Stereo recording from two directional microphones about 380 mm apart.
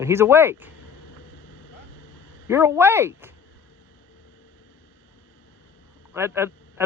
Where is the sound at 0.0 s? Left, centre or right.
Centre.